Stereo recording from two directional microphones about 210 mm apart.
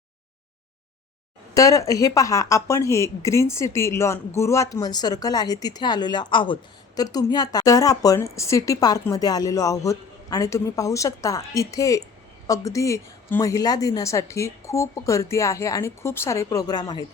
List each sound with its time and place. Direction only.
1.5 s speech: 15° left (ahead or behind)